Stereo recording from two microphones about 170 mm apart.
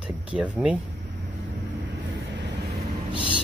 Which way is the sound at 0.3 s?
10° right (ahead or behind).